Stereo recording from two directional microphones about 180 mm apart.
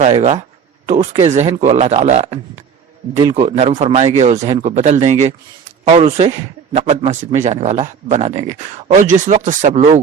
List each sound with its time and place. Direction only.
0.0 s a man's voice: 40° right (ahead or behind)